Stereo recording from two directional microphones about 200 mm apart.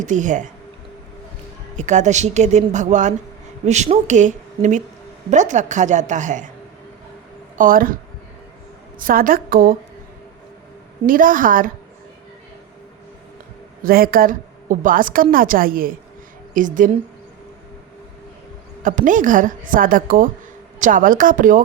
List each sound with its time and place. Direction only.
0.0 s a woman's voice: 40° right (ahead or behind)
1.7 s a woman's voice: 35° right (ahead or behind)
7.6 s a woman's voice: 45° right (ahead or behind)
9.0 s a woman's voice: 45° right (ahead or behind)
11.0 s a woman's voice: 45° right (ahead or behind)
13.8 s a woman's voice: 45° right (ahead or behind)
18.8 s a woman's voice: 40° right (ahead or behind)